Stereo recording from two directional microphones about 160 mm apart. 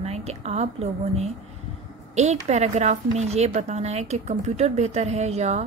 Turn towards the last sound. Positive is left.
turn(degrees=-45)  # may be behind; listen again after turning